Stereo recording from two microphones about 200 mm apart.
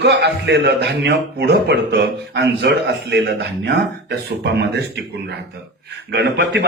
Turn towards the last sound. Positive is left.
turn(degrees=-55)  # may be behind; listen again after turning